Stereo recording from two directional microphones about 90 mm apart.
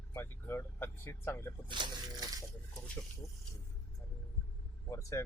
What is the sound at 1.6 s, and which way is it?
Speech, 60° right (ahead or behind).